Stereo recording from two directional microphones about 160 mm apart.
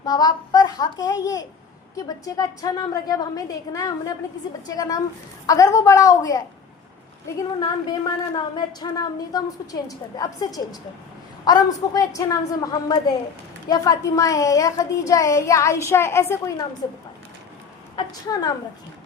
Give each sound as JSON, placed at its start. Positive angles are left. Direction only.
{"t": 0.0, "sound": "a woman's voice", "side_deg": 25}
{"t": 18.1, "sound": "a woman's voice", "side_deg": 25}